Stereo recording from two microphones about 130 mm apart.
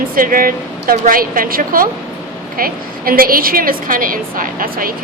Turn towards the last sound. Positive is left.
turn(degrees=-90)